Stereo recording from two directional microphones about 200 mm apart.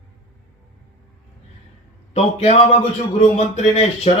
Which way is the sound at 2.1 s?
30° left (ahead or behind).